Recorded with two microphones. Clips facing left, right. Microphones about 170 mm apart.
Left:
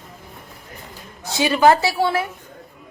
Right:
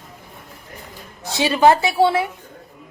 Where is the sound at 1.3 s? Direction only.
20° right (ahead or behind).